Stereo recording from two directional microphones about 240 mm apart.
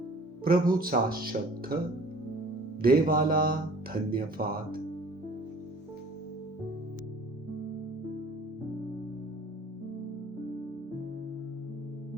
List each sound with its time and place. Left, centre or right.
0.4 s speech: right
2.8 s speech: right